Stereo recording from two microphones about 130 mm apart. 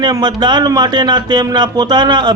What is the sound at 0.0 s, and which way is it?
A man's voice, 35° right (ahead or behind).